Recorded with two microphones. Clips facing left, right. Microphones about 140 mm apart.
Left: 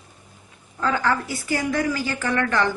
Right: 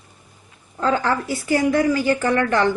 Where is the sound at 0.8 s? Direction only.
30° right (ahead or behind).